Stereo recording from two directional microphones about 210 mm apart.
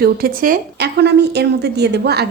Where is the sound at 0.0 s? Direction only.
45° right (ahead or behind).